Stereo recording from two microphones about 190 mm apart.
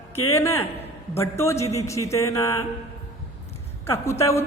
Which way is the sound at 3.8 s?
15° left (ahead or behind).